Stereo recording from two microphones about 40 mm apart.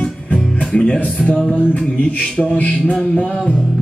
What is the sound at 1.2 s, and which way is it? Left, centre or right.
Music, centre.